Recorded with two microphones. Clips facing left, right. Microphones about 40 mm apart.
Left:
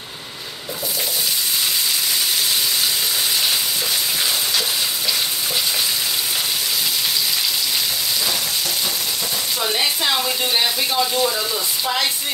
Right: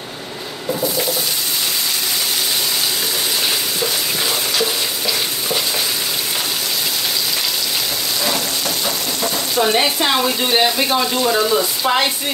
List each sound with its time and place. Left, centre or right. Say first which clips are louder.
9.6 s speech: right 6 dB; right
11.3 s speech: right 7 dB; right